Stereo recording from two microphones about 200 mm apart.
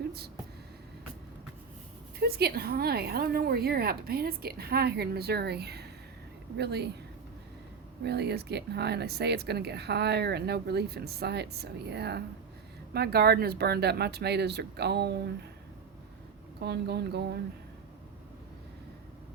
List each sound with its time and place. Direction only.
2.1 s a woman's voice: 50° right (ahead or behind)
8.0 s speech: 55° right (ahead or behind)
16.6 s speech: 55° right (ahead or behind)